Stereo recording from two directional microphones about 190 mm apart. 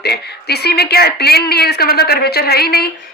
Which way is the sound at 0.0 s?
55° left (ahead or behind).